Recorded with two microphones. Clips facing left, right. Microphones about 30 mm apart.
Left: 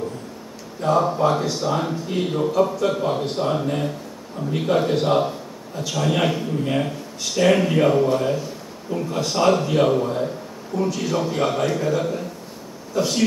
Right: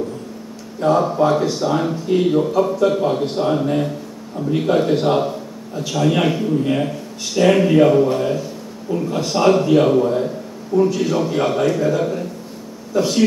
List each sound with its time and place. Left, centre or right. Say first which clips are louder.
0.7 s speech: right 3 dB; centre